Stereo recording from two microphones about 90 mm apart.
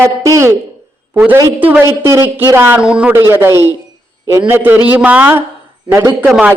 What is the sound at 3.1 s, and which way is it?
Speech, 30° right (ahead or behind).